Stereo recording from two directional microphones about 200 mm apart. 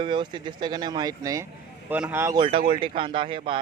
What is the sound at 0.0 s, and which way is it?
Speech, 25° right (ahead or behind).